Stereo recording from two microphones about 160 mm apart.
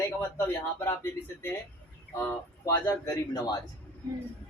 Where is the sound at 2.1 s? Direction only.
15° left (ahead or behind).